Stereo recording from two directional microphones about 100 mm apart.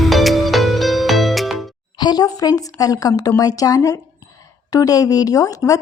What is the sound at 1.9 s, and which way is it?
A woman's voice, 45° left (ahead or behind).